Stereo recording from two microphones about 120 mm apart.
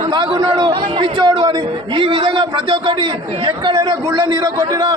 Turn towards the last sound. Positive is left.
turn(degrees=-40)  # may be behind; listen again after turning